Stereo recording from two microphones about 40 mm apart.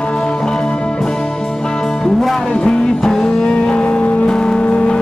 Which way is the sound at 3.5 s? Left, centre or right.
Left.